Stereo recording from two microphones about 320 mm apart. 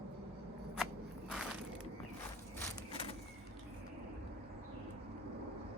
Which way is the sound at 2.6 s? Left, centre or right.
Centre.